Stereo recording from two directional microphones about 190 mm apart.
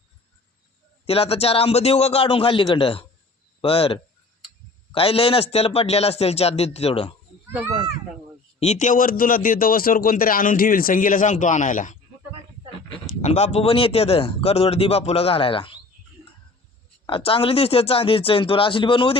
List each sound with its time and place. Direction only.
1.0 s speech: 30° left (ahead or behind)
8.5 s a man's voice: 35° left (ahead or behind)
13.2 s speech: 35° left (ahead or behind)
17.1 s speech: 30° left (ahead or behind)